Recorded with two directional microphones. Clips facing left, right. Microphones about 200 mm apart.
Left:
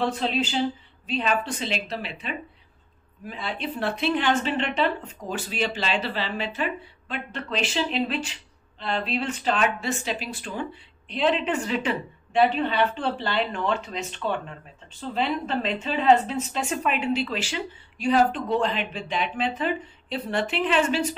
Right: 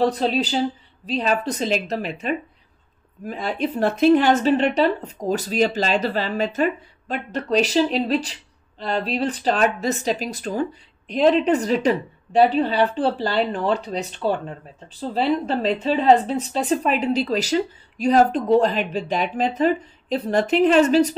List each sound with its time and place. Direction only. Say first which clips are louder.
0.0 s speech: right 5 dB; 35° right (ahead or behind)